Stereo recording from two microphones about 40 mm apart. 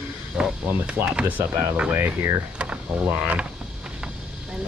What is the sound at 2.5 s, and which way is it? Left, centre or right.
Speech, right.